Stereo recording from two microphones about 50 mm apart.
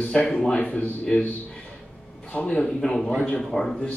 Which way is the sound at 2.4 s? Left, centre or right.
Left.